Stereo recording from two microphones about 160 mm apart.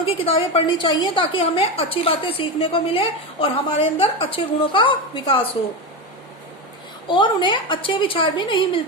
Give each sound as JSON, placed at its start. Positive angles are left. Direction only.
{"t": 0.0, "sound": "a woman's voice", "side_deg": 35}
{"t": 7.1, "sound": "a woman's voice", "side_deg": 30}